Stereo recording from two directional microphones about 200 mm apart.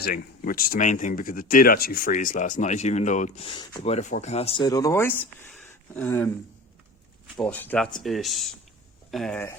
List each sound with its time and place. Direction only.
0.0 s speech: 45° left (ahead or behind)
4.6 s speech: 15° left (ahead or behind)
7.3 s speech: 5° left (ahead or behind)